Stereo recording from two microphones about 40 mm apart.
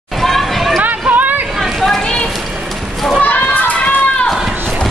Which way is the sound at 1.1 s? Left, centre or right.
Right.